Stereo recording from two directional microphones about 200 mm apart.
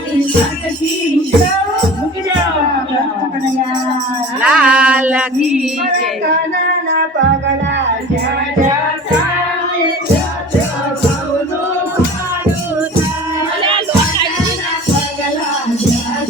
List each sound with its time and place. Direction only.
4.4 s female singing: 5° right (ahead or behind)
7.2 s music: 65° right (ahead or behind)